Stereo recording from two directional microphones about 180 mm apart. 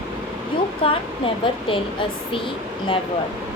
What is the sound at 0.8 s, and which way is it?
A woman's voice, 30° left (ahead or behind).